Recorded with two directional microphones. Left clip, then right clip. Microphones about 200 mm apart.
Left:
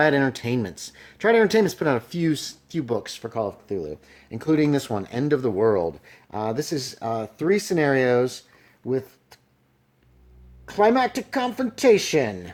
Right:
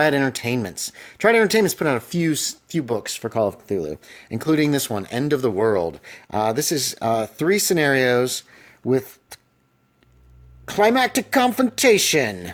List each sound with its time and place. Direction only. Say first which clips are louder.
0.0 s speech: right 1 dB; 35° right (ahead or behind)
10.7 s speech: right 2 dB; 40° right (ahead or behind)